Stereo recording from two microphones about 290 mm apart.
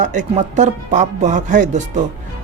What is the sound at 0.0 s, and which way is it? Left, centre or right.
A woman's voice, right.